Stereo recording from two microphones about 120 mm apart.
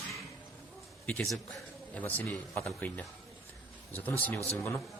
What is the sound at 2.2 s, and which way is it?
Speech, 20° left (ahead or behind).